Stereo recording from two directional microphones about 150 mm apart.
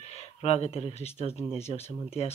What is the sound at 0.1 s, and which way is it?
Speech, 45° left (ahead or behind).